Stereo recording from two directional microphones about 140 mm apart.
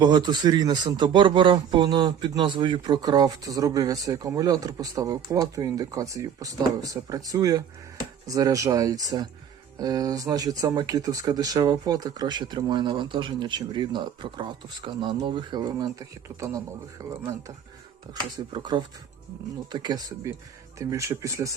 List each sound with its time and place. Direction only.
0.0 s a man's voice: 30° right (ahead or behind)